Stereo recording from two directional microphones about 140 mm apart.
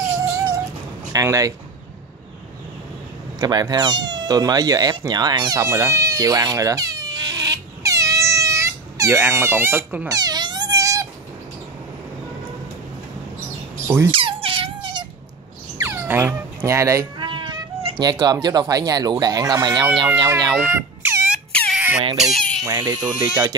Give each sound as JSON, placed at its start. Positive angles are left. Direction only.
{"t": 0.3, "sound": "dog", "side_deg": -20}
{"t": 1.1, "sound": "speech", "side_deg": -25}
{"t": 3.3, "sound": "speech", "side_deg": -30}
{"t": 10.0, "sound": "cat", "side_deg": -30}
{"t": 13.8, "sound": "speech", "side_deg": -20}
{"t": 14.1, "sound": "squeak", "side_deg": -40}
{"t": 15.8, "sound": "a sound", "side_deg": -15}
{"t": 17.2, "sound": "speech", "side_deg": -35}
{"t": 20.5, "sound": "a sound", "side_deg": -15}
{"t": 21.5, "sound": "a sound", "side_deg": 5}
{"t": 21.7, "sound": "a sound", "side_deg": -5}
{"t": 22.1, "sound": "speech", "side_deg": 0}
{"t": 22.7, "sound": "speech", "side_deg": -25}